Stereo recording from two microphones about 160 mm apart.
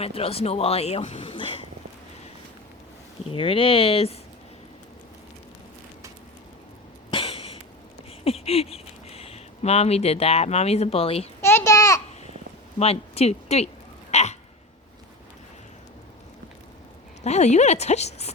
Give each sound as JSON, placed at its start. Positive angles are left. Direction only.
{"t": 0.0, "sound": "speech", "side_deg": 35}
{"t": 3.2, "sound": "speech", "side_deg": 35}
{"t": 7.1, "sound": "cough", "side_deg": 35}
{"t": 8.2, "sound": "speech", "side_deg": 40}
{"t": 11.3, "sound": "a sound", "side_deg": 15}
{"t": 12.8, "sound": "speech", "side_deg": 40}
{"t": 14.1, "sound": "hiccup", "side_deg": 45}
{"t": 17.2, "sound": "a woman's voice", "side_deg": 45}